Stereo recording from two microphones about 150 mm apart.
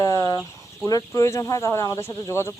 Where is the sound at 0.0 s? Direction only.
25° left (ahead or behind).